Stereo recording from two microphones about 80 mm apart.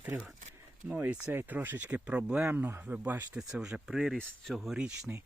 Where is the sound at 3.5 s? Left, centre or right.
Centre.